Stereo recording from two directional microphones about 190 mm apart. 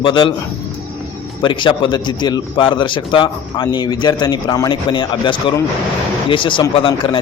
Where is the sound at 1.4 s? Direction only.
25° left (ahead or behind).